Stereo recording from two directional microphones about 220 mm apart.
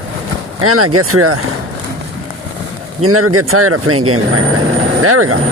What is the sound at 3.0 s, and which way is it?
Speech, 80° right.